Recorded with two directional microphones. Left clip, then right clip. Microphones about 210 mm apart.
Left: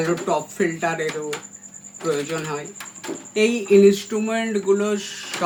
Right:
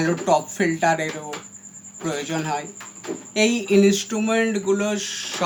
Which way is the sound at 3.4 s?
40° right (ahead or behind).